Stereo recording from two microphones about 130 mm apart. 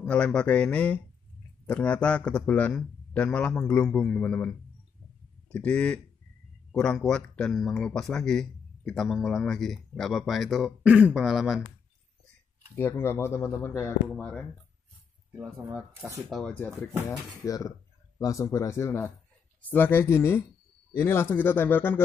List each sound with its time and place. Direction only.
0.0 s a man's voice: 5° left (ahead or behind)
12.7 s a man's voice: 20° left (ahead or behind)
16.2 s speech: centre (ahead or behind)
17.1 s a man's voice: 25° left (ahead or behind)